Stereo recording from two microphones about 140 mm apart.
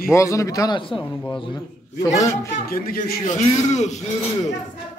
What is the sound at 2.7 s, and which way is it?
Speech, 90° left.